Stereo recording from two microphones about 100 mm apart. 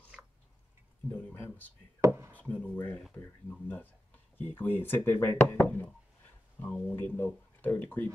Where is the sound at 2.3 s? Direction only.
15° left (ahead or behind).